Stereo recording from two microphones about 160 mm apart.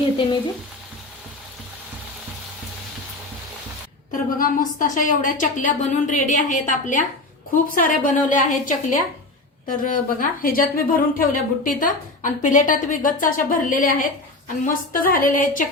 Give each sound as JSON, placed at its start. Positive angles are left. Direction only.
{"t": 4.4, "sound": "a woman's voice", "side_deg": 55}